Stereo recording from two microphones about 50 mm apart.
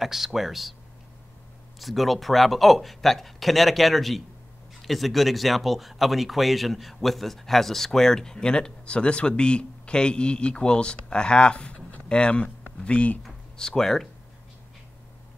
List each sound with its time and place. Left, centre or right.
0.0 s speech: centre
1.8 s speech: centre; by 13.2 s left
13.6 s speech: centre